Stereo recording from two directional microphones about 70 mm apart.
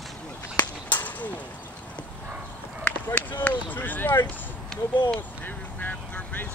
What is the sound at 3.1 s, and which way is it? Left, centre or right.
Speech, left.